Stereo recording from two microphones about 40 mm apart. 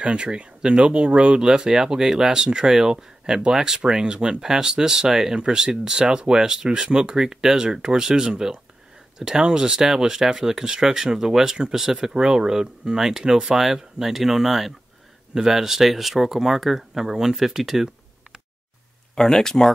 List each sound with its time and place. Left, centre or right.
0.0 s speech: right; by 17.8 s centre
19.1 s speech: centre